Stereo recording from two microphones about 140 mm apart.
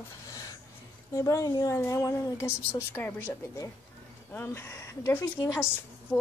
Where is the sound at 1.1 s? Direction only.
25° left (ahead or behind).